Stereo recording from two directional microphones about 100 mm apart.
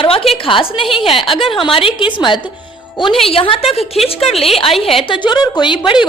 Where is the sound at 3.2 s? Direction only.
65° left (ahead or behind).